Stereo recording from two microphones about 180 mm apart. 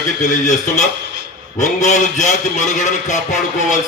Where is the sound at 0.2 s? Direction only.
40° left (ahead or behind).